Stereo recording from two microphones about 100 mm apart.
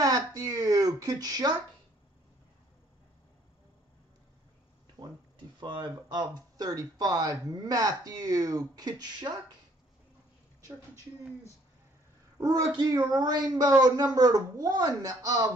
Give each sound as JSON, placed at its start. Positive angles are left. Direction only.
{"t": 0.0, "sound": "a sound", "side_deg": -35}
{"t": 5.0, "sound": "speech", "side_deg": -40}
{"t": 12.4, "sound": "speech", "side_deg": -40}